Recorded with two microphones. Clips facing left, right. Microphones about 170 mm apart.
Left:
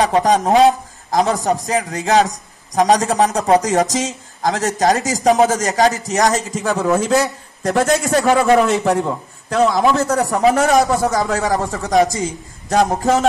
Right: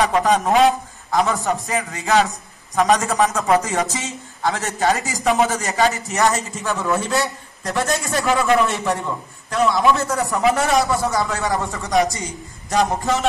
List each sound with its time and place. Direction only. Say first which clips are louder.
0.0 s a man's voice: left 3 dB; 35° left (ahead or behind)